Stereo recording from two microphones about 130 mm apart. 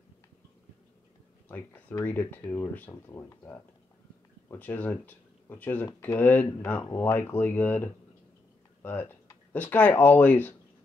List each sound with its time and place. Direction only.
1.5 s speech: 15° left (ahead or behind)
9.5 s speech: 15° left (ahead or behind)